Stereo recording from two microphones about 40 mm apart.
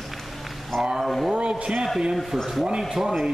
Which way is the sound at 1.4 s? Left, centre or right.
Right.